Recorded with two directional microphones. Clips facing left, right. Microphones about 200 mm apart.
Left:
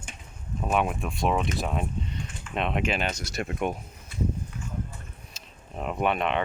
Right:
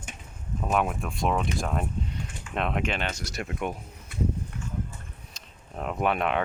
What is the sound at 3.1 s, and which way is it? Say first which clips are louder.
Speech: left 2 dB; 20° left (ahead or behind).